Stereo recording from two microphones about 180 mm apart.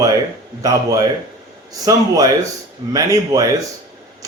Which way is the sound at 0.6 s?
20° right (ahead or behind).